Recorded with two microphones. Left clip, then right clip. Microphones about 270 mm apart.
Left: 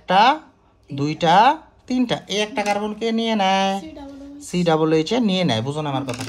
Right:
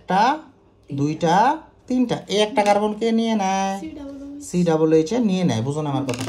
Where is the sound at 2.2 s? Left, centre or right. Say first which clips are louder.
Right 4 dB; centre.